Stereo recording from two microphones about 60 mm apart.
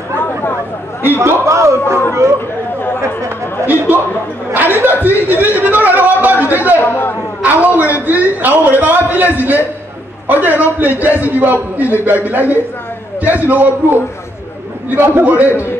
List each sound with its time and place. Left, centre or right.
1.1 s a man's voice: right
3.9 s speech: right
5.4 s a sound: right
6.5 s a man's voice: right
6.8 s a man's voice: left
7.4 s a man's voice: right